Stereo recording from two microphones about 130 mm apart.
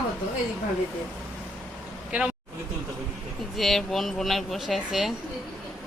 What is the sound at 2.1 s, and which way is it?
Speech, 10° right (ahead or behind).